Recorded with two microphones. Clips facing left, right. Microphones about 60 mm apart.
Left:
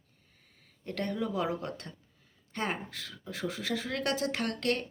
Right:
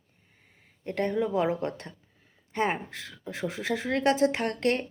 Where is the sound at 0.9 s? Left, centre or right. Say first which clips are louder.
Right 6 dB; right.